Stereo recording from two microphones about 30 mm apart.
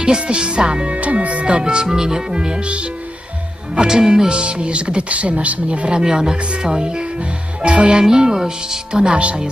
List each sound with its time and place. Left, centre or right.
0.0 s speech: right
0.9 s speech: right
1.5 s speech: right
3.8 s speech: right
4.3 s speech: right
5.9 s speech: right
8.0 s speech: right
9.1 s speech: right